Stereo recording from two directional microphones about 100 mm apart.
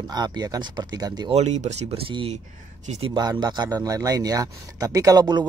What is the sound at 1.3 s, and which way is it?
Speech, 90° right.